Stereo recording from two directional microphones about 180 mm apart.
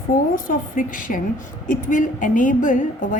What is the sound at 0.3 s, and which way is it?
A woman's voice, 50° left (ahead or behind).